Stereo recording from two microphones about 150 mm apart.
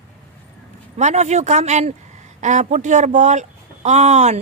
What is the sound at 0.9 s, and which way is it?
A woman's voice, 50° right (ahead or behind).